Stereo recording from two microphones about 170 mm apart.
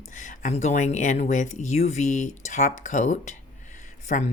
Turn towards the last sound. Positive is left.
turn(degrees=45)  # may be behind; listen again after turning